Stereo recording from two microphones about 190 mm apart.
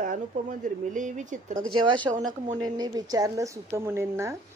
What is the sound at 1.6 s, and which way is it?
A woman's voice, 25° right (ahead or behind).